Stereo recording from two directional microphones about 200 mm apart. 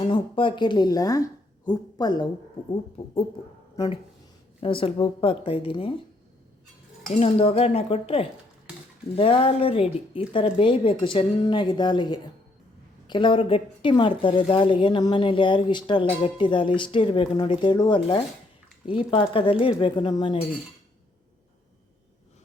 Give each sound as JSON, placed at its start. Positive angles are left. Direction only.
{"t": 0.0, "sound": "speech", "side_deg": 25}
{"t": 4.6, "sound": "speech", "side_deg": 25}
{"t": 7.1, "sound": "speech", "side_deg": 30}